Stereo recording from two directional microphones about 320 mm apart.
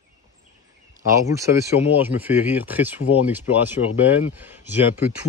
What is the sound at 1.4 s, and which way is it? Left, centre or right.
Speech, centre.